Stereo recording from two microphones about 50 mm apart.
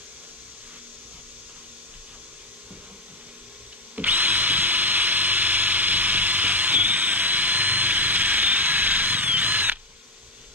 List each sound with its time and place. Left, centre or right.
3.9 s drill: right